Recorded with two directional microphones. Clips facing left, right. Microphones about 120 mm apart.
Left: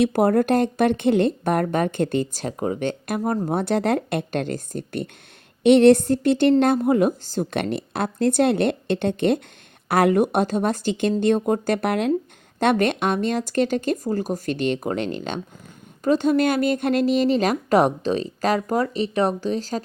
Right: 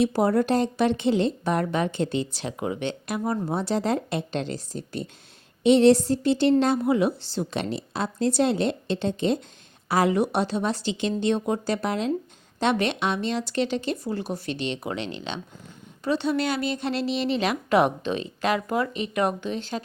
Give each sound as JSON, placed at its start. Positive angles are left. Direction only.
{"t": 0.0, "sound": "speech", "side_deg": 55}
{"t": 3.5, "sound": "a woman's voice", "side_deg": 55}
{"t": 12.5, "sound": "a woman's voice", "side_deg": 50}